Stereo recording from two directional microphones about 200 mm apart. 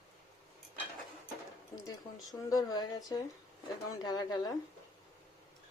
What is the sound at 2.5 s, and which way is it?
Speech, 20° left (ahead or behind).